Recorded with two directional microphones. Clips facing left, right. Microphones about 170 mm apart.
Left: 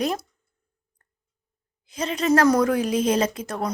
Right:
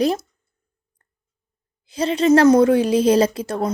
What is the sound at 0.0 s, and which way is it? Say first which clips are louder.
Speech: right 6 dB; 30° right (ahead or behind).